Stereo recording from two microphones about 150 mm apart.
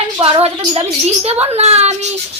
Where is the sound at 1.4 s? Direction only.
45° right (ahead or behind).